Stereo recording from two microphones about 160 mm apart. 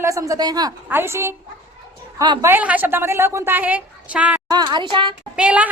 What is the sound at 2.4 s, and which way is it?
A woman's voice, 10° right (ahead or behind).